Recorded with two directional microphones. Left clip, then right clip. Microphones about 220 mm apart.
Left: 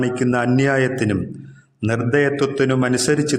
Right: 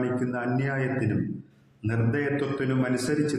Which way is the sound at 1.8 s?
45° left (ahead or behind).